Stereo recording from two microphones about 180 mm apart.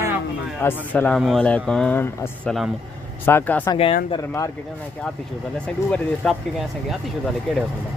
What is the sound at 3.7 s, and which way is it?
Speech, 30° left (ahead or behind).